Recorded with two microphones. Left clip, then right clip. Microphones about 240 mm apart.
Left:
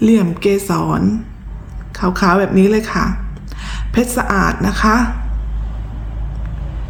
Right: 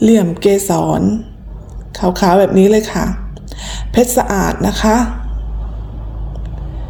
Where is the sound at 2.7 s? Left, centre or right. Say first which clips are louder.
Right 2 dB; left.